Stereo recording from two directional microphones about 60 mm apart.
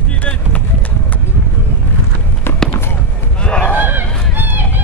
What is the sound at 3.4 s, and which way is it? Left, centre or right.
Honk, centre.